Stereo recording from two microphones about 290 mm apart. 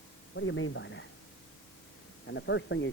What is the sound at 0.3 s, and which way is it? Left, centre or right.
Speech, left.